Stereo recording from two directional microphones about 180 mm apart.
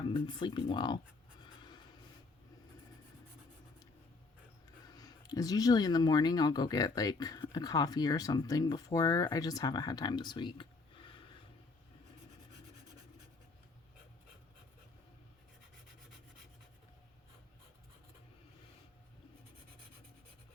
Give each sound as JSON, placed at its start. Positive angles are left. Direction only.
{"t": 0.1, "sound": "speech", "side_deg": 25}
{"t": 1.4, "sound": "writing", "side_deg": 25}
{"t": 4.9, "sound": "speech", "side_deg": 20}